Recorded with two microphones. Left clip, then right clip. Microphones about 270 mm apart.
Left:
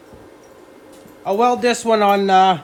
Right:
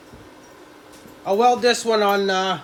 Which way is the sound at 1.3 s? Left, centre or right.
Left.